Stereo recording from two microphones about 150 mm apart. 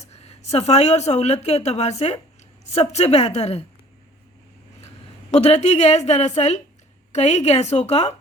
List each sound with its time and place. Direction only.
0.0 s a woman's voice: 45° left (ahead or behind)
5.3 s a woman's voice: 45° left (ahead or behind)